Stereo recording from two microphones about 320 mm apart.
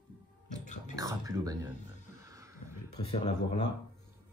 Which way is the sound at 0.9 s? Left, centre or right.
Centre.